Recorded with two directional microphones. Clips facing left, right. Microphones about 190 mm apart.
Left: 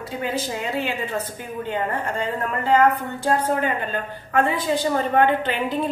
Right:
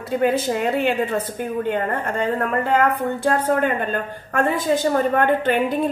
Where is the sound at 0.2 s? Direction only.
55° right (ahead or behind).